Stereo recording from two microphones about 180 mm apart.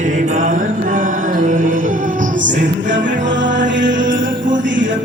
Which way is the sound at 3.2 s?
85° right.